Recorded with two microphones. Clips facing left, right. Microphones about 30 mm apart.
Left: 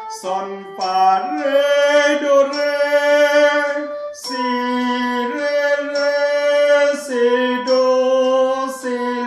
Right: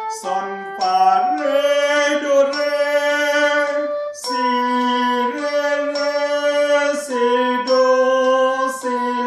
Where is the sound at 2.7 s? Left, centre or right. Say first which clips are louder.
Left 3 dB; left.